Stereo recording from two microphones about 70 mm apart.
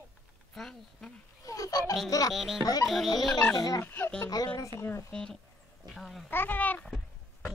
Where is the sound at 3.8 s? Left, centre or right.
Left.